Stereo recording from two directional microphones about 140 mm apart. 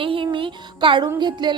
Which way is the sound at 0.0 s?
40° right (ahead or behind).